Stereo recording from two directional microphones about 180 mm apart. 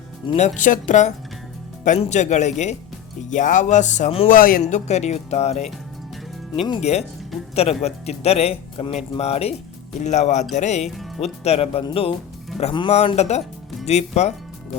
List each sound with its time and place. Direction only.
0.3 s speech: 40° left (ahead or behind)
4.3 s speech: 50° left (ahead or behind)
4.6 s speech: 40° left (ahead or behind)
10.8 s speech: centre (ahead or behind)
11.2 s speech: 35° left (ahead or behind)